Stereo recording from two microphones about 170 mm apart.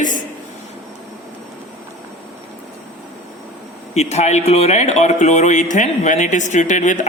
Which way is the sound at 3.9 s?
40° left (ahead or behind).